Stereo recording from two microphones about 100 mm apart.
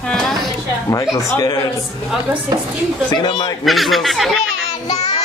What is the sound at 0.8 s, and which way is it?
Speech, 35° left (ahead or behind).